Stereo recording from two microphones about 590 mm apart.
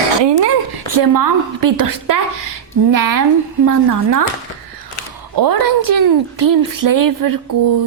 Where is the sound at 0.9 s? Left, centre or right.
Right.